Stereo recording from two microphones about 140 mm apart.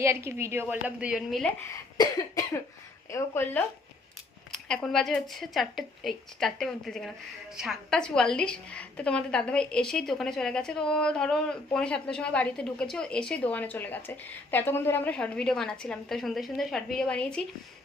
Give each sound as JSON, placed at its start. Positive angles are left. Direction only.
{"t": 0.0, "sound": "a woman's voice", "side_deg": -20}
{"t": 3.1, "sound": "a woman's voice", "side_deg": 20}
{"t": 4.5, "sound": "a woman's voice", "side_deg": 5}